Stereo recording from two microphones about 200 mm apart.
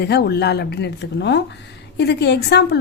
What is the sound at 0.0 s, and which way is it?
A woman's voice, 55° left (ahead or behind).